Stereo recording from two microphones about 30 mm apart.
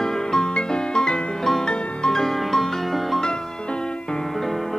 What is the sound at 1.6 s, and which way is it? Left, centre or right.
Music, left.